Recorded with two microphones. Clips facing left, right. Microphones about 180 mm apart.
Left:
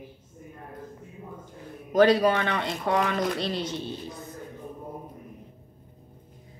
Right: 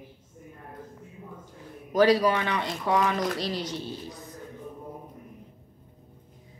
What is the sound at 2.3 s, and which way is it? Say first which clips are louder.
Speech: left 1 dB; 55° left (ahead or behind).